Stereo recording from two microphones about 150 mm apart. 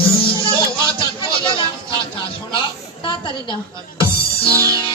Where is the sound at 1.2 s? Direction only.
35° left (ahead or behind).